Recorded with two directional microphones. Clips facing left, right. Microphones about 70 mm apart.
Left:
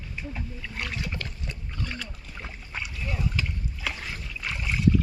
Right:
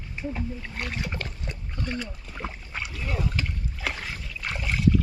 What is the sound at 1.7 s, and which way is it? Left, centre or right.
Splash, right.